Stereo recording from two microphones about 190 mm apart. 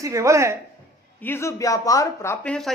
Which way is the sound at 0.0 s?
15° right (ahead or behind).